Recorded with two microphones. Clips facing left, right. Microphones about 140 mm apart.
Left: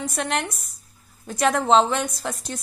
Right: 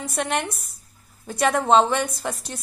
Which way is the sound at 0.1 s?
Centre (ahead or behind).